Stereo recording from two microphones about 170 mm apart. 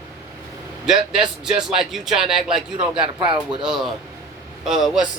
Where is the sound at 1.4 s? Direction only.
5° right (ahead or behind).